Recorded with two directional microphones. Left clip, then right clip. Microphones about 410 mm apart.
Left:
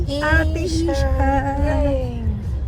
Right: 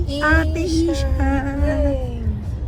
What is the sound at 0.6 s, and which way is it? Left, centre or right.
Speech, left.